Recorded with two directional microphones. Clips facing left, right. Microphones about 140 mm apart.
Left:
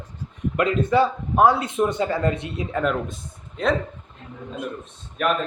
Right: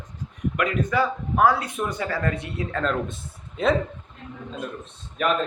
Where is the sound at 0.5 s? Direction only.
30° left (ahead or behind).